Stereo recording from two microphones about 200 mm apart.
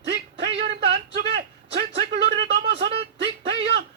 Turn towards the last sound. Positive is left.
turn(degrees=-60)  # may be behind; listen again after turning